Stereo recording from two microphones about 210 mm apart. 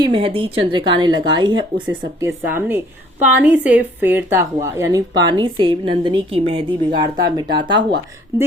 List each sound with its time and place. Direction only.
0.0 s speech: 25° right (ahead or behind)
2.5 s a woman's voice: 10° right (ahead or behind)